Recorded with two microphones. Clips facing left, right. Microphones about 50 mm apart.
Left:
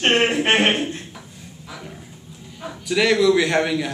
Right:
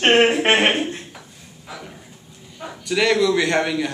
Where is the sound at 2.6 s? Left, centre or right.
Centre.